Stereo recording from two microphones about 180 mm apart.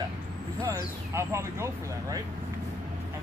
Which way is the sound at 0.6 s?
15° right (ahead or behind).